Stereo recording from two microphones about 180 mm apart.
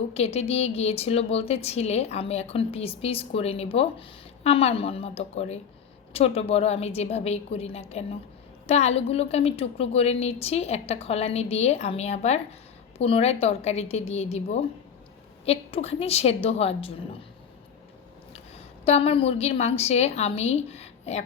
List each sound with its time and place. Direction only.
0.1 s speech: 35° left (ahead or behind)
18.3 s a woman's voice: 35° left (ahead or behind)